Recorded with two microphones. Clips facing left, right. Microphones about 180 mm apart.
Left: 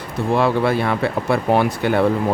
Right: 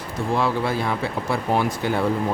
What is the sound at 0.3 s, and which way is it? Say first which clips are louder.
Speech: left 5 dB; 65° left (ahead or behind).